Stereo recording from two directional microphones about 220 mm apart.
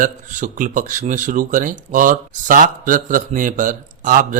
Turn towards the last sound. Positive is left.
turn(degrees=-35)  # may be behind; listen again after turning